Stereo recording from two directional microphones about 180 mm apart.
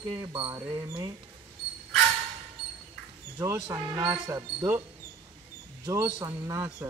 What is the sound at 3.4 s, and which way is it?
Speech, 15° right (ahead or behind).